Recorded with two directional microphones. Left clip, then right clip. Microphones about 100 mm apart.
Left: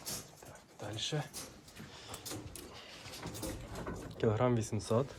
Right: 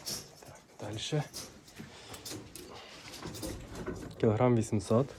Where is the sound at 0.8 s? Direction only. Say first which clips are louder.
Right 2 dB; 30° left (ahead or behind).